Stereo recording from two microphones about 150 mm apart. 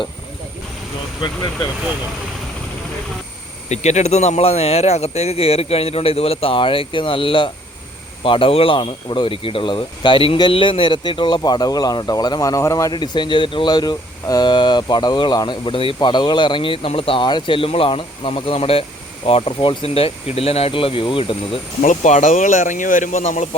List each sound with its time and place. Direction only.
3.7 s speech: 45° left (ahead or behind)
21.8 s speech: 55° left (ahead or behind)